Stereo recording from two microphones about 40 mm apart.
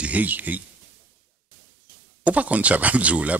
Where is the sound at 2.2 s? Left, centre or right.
Right.